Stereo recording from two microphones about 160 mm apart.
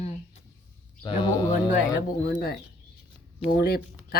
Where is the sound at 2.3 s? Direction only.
70° left (ahead or behind).